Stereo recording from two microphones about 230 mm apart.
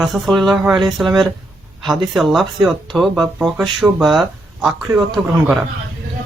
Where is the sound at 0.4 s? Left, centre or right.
Centre.